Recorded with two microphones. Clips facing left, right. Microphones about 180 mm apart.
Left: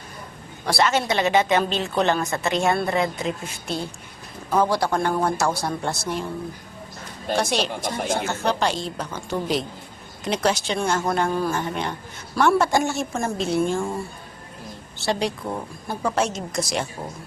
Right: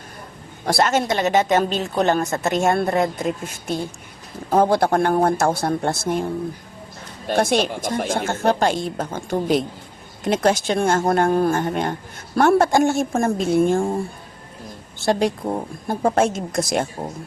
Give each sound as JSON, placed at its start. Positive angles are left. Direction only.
{"t": 0.6, "sound": "a woman's voice", "side_deg": -45}
{"t": 7.5, "sound": "a woman's voice", "side_deg": -50}